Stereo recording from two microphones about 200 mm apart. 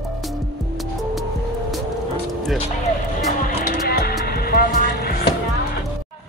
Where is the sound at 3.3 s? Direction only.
40° left (ahead or behind).